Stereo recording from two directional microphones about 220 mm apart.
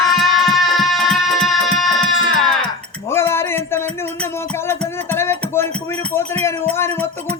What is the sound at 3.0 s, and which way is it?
Music, 10° left (ahead or behind).